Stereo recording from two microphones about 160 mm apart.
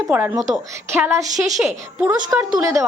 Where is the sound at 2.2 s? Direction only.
20° right (ahead or behind).